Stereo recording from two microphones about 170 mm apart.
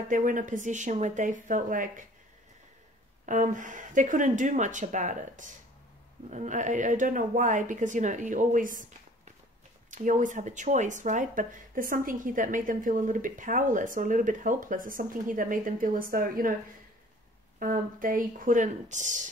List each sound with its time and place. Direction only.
0.1 s speech: 50° right (ahead or behind)
3.3 s speech: 50° right (ahead or behind)
17.6 s speech: 55° right (ahead or behind)